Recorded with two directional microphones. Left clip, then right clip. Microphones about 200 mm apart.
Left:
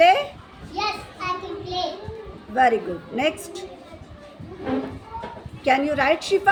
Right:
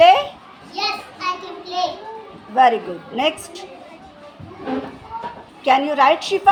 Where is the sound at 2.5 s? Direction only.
30° left (ahead or behind).